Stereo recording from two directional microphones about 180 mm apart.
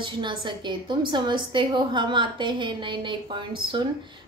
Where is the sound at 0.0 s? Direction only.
25° right (ahead or behind).